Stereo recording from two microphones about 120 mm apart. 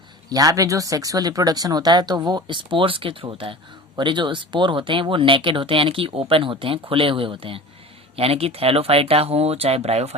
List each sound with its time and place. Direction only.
0.3 s speech: 30° right (ahead or behind); by 10.2 s 60° right (ahead or behind)